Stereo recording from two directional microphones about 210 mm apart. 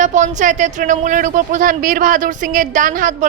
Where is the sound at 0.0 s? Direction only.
35° right (ahead or behind).